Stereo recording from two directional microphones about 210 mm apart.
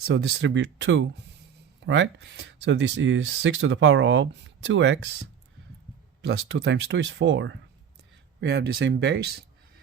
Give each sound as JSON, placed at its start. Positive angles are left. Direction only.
{"t": 0.0, "sound": "speech", "side_deg": -50}
{"t": 6.2, "sound": "speech", "side_deg": -55}